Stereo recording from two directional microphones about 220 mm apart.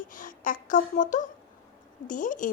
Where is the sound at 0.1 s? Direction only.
35° left (ahead or behind).